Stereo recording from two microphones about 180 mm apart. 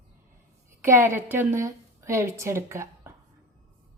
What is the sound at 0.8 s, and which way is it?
A woman's voice, 15° right (ahead or behind).